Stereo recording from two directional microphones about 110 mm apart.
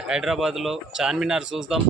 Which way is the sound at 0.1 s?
5° right (ahead or behind).